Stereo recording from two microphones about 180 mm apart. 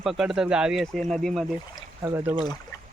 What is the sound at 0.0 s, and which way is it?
Speech, centre (ahead or behind).